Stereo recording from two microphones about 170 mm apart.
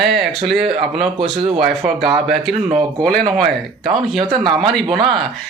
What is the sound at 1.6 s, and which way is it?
Speech, centre (ahead or behind).